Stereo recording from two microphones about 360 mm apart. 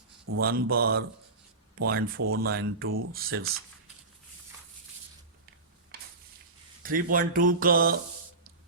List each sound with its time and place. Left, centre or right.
0.3 s speech: right
5.9 s a sound: right
6.8 s speech: right